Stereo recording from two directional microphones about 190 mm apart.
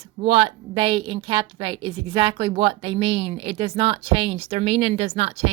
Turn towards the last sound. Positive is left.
turn(degrees=-30)  # may be behind; listen again after turning